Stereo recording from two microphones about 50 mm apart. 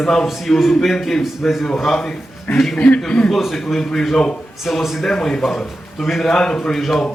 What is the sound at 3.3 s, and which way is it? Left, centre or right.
A man's voice, centre.